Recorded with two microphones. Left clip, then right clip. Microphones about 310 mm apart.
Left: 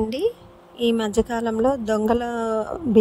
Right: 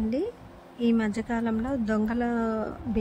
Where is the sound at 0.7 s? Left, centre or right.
Centre.